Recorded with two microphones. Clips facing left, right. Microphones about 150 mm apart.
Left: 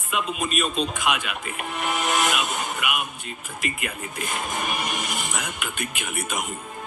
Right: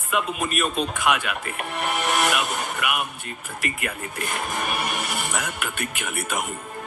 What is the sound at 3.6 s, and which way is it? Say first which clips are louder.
Speech: right 1 dB; 15° left (ahead or behind).